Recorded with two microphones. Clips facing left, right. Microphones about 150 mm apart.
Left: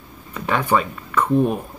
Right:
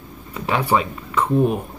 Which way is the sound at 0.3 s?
10° right (ahead or behind).